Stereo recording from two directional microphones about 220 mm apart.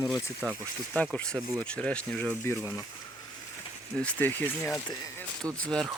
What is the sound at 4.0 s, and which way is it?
Speech, 5° left (ahead or behind).